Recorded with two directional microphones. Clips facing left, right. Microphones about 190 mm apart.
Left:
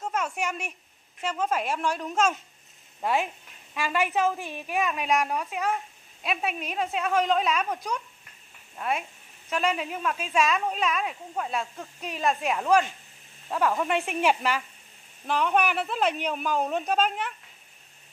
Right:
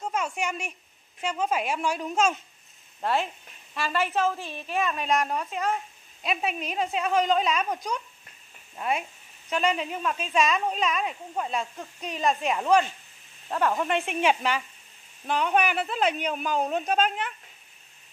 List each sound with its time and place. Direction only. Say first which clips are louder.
0.0 s a woman's voice: even; 5° left (ahead or behind)
3.0 s a woman's voice: even; 10° left (ahead or behind)